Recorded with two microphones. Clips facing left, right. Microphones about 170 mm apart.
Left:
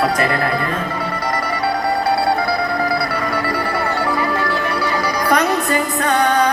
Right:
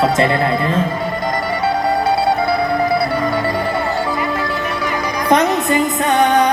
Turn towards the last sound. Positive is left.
turn(degrees=-20)  # may be behind; listen again after turning